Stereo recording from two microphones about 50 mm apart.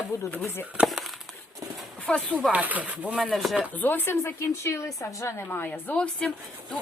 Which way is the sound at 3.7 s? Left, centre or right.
Left.